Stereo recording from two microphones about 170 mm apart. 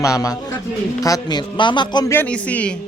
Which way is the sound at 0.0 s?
20° left (ahead or behind).